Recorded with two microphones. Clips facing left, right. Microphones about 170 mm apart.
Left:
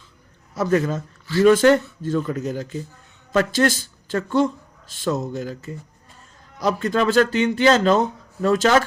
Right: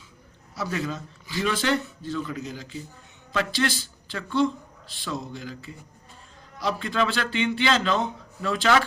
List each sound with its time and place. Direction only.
0.5 s speech: 50° left (ahead or behind)